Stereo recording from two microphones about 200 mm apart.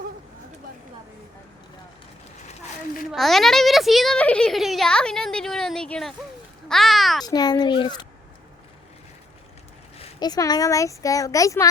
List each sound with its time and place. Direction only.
3.1 s a child's voice: centre (ahead or behind)
7.3 s speech: 20° left (ahead or behind)
10.2 s a child's voice: 20° left (ahead or behind)